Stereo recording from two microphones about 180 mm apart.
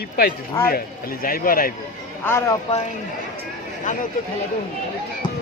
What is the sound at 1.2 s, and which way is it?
Speech, 55° left (ahead or behind).